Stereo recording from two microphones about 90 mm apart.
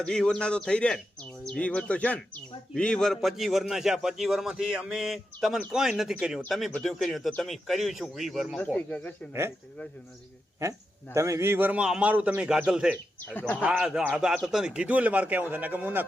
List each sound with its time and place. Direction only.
0.0 s speech: 5° left (ahead or behind)
8.5 s speech: 10° left (ahead or behind)
10.6 s a man's voice: 35° right (ahead or behind); by 12.5 s 20° right (ahead or behind)
12.5 s speech: 5° right (ahead or behind)